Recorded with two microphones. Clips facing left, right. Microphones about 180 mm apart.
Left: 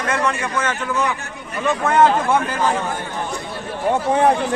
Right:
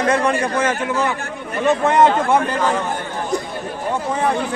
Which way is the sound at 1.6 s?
Centre (ahead or behind).